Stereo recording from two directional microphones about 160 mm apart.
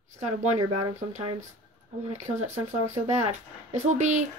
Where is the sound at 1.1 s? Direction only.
45° right (ahead or behind).